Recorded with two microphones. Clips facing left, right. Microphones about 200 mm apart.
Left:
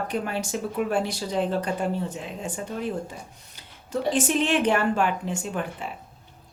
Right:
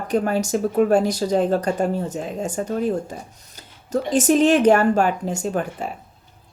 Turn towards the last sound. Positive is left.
turn(degrees=-40)  # may be behind; listen again after turning